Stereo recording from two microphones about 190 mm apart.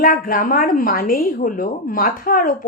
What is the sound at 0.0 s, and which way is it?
Speech, 45° left (ahead or behind).